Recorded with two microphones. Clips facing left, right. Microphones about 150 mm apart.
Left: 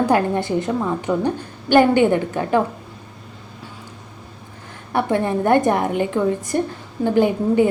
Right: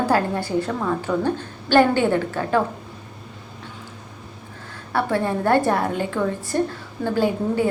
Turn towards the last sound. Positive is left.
turn(degrees=20)  # may be behind; listen again after turning